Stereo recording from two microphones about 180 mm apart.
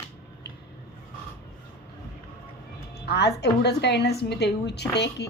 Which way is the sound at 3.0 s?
65° left (ahead or behind).